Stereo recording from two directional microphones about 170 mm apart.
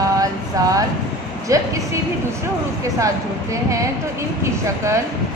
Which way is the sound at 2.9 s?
20° right (ahead or behind).